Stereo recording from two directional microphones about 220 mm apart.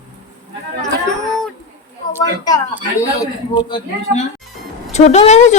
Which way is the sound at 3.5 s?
20° left (ahead or behind).